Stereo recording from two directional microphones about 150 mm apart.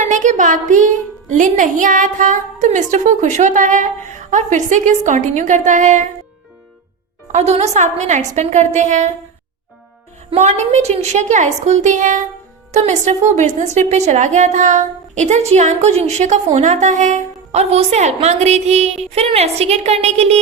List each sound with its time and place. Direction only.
0.0 s a woman's voice: 55° right (ahead or behind)
7.3 s a woman's voice: 50° right (ahead or behind)
10.3 s a woman's voice: 45° right (ahead or behind)